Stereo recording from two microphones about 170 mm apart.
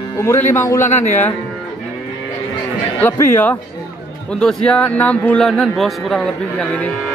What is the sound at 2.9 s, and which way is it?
A man's voice, 15° left (ahead or behind).